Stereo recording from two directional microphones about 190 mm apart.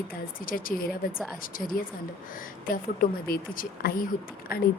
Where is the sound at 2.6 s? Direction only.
50° left (ahead or behind).